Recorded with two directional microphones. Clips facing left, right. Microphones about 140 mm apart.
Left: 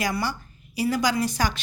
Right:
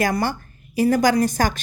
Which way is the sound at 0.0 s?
50° right (ahead or behind).